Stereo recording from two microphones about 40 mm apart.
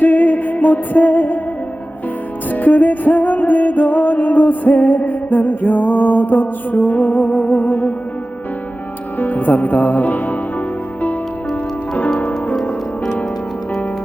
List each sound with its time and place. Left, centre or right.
0.0 s music: left
2.5 s music: left
9.1 s music: left